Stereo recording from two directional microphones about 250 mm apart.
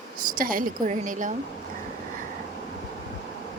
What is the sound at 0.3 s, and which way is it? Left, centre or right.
Speech, right.